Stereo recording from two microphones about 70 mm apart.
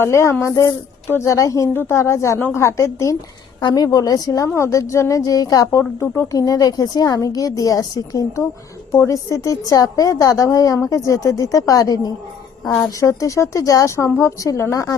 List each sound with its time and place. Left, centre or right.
0.0 s a woman's voice: left
1.7 s a woman's voice: left
3.6 s a woman's voice: left
3.9 s a woman's voice: left
4.4 s a woman's voice: left
6.0 s a woman's voice: left
6.4 s a woman's voice: left
8.9 s a woman's voice: left
13.0 s a woman's voice: left